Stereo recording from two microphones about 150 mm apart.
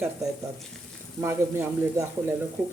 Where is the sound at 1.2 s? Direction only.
15° right (ahead or behind).